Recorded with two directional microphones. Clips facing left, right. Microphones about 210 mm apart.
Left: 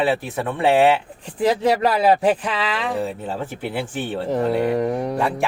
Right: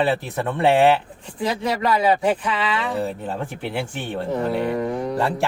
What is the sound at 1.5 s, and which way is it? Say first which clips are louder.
Speech: left 3 dB; 35° left (ahead or behind).